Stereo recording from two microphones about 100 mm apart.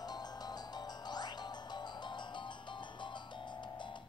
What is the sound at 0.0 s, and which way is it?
Music, 45° left (ahead or behind).